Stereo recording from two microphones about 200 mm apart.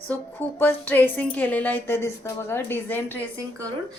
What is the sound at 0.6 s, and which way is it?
A woman's voice, 10° left (ahead or behind).